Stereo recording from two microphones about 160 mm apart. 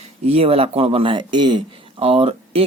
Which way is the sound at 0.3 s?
40° right (ahead or behind).